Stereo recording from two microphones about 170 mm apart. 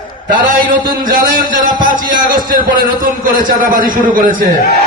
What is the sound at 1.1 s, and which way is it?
A man's voice, 55° right (ahead or behind).